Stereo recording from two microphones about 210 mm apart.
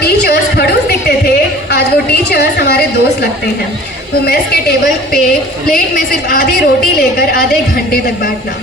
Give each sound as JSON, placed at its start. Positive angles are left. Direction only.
{"t": 0.0, "sound": "a sound", "side_deg": 50}
{"t": 2.3, "sound": "a woman's voice", "side_deg": 50}
{"t": 5.7, "sound": "a woman's voice", "side_deg": 45}